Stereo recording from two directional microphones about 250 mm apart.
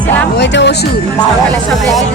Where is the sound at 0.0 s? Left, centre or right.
Centre.